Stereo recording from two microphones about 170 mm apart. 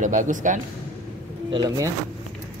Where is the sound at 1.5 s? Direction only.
25° right (ahead or behind).